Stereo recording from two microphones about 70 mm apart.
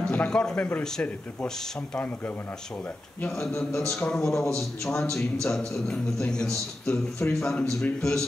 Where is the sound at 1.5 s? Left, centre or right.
Centre.